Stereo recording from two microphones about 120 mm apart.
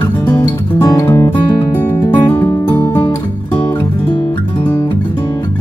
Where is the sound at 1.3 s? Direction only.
45° left (ahead or behind).